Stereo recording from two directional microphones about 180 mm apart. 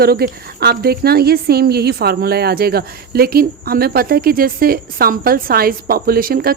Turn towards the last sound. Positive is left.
turn(degrees=-55)  # may be behind; listen again after turning